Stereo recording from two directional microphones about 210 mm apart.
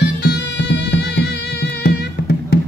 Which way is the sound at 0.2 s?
55° left (ahead or behind).